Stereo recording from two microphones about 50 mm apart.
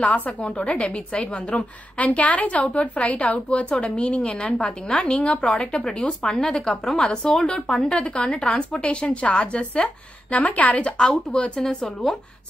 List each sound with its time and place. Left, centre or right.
0.0 s a woman's voice: left; by 12.2 s centre